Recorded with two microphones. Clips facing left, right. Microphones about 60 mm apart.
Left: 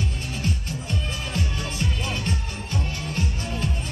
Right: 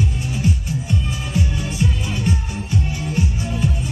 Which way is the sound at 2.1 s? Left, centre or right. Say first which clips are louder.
Right 6 dB; centre.